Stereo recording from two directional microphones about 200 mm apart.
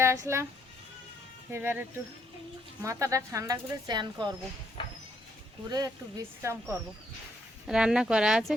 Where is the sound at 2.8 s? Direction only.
15° right (ahead or behind).